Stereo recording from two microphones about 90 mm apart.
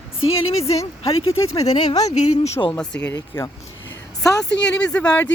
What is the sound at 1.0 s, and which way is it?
Speech, 90° left.